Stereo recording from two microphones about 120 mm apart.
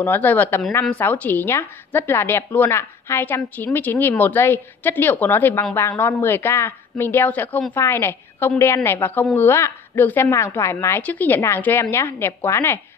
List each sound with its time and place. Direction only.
0.0 s a woman's voice: 15° left (ahead or behind)